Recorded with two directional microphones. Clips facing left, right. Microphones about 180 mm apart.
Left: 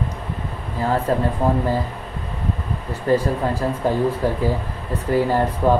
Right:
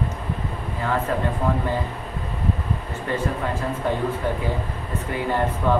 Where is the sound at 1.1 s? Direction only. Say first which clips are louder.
Left 4 dB; 35° left (ahead or behind).